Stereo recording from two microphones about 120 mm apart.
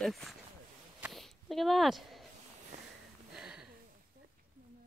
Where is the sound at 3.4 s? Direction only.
5° right (ahead or behind).